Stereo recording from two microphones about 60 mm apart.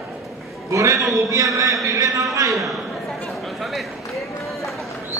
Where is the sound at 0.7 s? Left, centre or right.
Right.